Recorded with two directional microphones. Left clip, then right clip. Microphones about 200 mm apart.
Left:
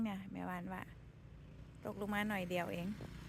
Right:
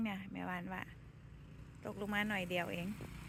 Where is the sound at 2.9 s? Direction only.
30° right (ahead or behind).